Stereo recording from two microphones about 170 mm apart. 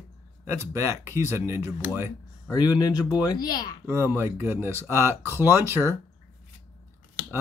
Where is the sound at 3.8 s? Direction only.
15° right (ahead or behind).